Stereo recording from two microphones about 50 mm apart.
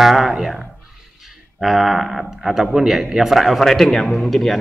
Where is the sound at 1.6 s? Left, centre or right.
Centre.